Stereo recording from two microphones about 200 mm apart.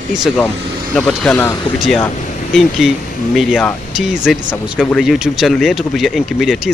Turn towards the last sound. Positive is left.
turn(degrees=0)  # may be behind; listen again after turning